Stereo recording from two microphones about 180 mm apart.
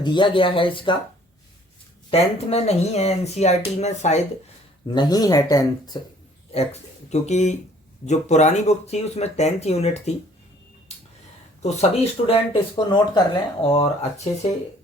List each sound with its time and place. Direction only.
0.0 s speech: 25° left (ahead or behind)
2.0 s speech: 35° left (ahead or behind)
4.9 s speech: 20° left (ahead or behind)
7.1 s speech: 40° left (ahead or behind)
11.6 s speech: 35° left (ahead or behind)